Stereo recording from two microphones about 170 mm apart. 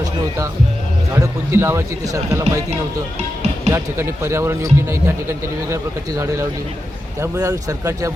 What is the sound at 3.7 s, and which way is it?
Speech, 15° right (ahead or behind).